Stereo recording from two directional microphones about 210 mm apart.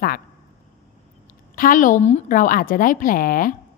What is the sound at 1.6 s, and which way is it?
A woman's voice, 40° left (ahead or behind).